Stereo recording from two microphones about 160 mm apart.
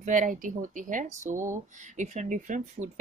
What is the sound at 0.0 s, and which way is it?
Speech, 55° right (ahead or behind).